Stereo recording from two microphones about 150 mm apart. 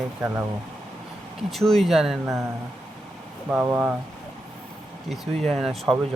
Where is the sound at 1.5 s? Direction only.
Centre (ahead or behind).